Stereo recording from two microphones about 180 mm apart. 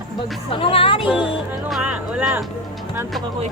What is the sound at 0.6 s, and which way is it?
Speech, 30° left (ahead or behind).